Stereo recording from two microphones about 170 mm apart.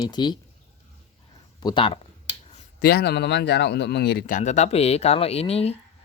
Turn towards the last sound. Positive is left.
turn(degrees=35)  # may be behind; listen again after turning